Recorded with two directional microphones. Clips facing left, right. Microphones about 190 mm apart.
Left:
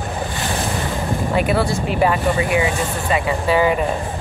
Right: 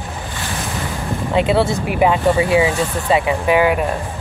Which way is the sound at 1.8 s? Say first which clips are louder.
Right 3 dB; 15° right (ahead or behind).